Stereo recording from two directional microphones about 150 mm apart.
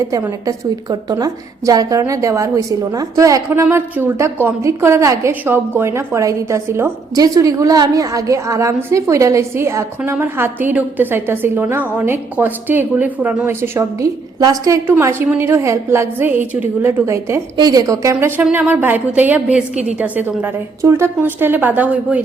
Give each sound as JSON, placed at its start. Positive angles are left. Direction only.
{"t": 0.0, "sound": "a woman's voice", "side_deg": -20}